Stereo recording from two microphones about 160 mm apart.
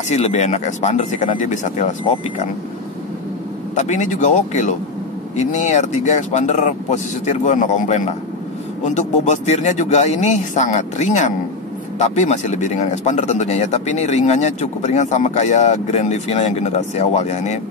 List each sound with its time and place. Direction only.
0.1 s speech: 45° left (ahead or behind)
3.7 s speech: 50° left (ahead or behind)